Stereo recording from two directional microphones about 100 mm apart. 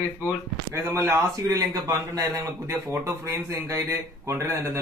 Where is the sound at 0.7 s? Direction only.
25° right (ahead or behind).